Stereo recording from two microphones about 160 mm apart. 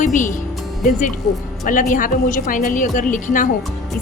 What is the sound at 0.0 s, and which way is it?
Speech, 50° left (ahead or behind).